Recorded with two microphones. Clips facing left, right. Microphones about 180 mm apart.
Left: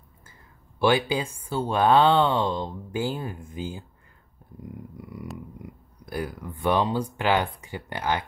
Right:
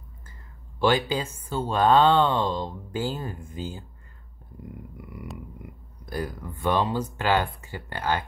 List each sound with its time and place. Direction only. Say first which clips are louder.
0.7 s speech: left 1 dB; 10° left (ahead or behind)
5.0 s a sound: left 2 dB; 20° left (ahead or behind)
6.0 s speech: even; 10° left (ahead or behind)